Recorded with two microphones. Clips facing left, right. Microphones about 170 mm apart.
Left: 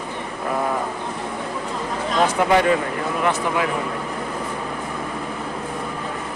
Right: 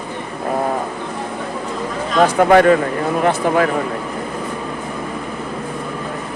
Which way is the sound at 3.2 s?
40° right (ahead or behind).